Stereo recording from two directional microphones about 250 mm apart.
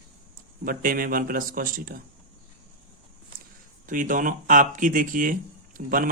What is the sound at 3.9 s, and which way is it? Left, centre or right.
Speech, right.